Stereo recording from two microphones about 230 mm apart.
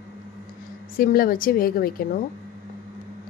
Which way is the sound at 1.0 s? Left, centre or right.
Left.